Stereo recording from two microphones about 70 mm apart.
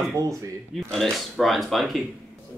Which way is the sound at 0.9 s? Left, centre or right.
Centre.